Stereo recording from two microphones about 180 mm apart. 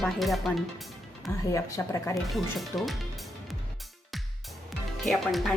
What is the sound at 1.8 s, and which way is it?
Speech, 15° left (ahead or behind).